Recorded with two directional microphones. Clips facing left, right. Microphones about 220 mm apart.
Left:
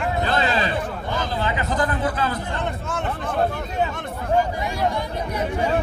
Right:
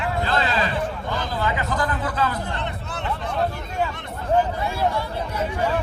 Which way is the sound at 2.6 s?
45° left (ahead or behind).